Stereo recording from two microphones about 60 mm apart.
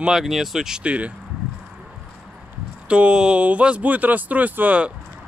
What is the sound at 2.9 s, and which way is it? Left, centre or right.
Speech, centre.